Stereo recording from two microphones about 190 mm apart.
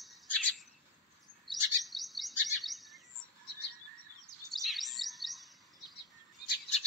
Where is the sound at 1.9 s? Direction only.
Centre (ahead or behind).